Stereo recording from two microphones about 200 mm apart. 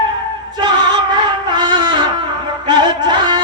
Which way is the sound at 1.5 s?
20° right (ahead or behind).